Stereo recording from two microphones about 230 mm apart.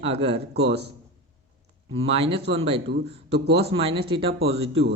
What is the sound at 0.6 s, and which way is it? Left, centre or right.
Speech, right.